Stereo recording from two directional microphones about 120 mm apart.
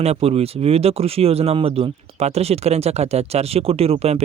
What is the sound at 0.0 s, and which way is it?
Speech, 60° right (ahead or behind).